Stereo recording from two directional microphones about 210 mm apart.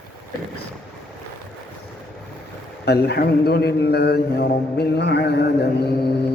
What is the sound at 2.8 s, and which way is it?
A man's voice, 50° left (ahead or behind).